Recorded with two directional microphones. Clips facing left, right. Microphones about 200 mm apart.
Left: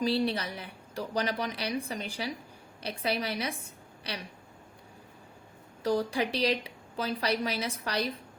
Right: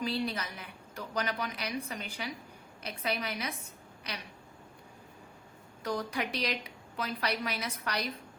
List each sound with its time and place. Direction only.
0.0 s a woman's voice: 30° left (ahead or behind)
5.8 s a woman's voice: 30° left (ahead or behind)